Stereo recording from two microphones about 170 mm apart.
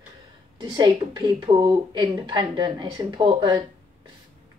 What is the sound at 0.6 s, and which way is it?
A woman's voice, 25° right (ahead or behind).